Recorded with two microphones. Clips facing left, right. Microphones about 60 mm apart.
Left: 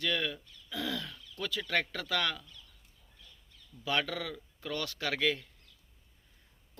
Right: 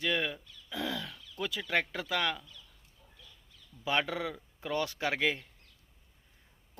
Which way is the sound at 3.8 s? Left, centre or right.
Right.